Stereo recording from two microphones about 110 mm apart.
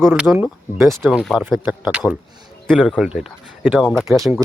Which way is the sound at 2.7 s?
5° left (ahead or behind).